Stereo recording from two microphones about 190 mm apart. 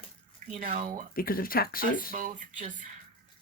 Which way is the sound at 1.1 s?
50° left (ahead or behind).